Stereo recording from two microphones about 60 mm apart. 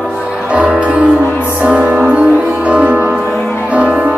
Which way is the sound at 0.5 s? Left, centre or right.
Centre.